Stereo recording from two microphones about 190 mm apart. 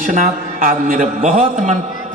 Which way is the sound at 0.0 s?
45° right (ahead or behind).